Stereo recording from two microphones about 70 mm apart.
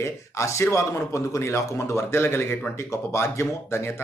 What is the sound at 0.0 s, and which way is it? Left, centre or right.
Speech, left.